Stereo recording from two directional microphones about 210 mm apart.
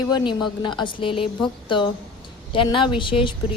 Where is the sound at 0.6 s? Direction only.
20° left (ahead or behind).